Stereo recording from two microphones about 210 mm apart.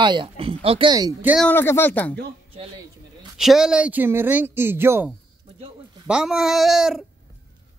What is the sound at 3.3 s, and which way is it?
Speech, centre (ahead or behind).